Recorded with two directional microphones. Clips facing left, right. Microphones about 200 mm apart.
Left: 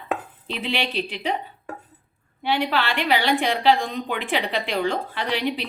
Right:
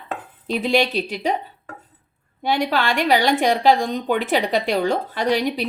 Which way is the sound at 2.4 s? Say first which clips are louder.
Right 3 dB; 40° right (ahead or behind).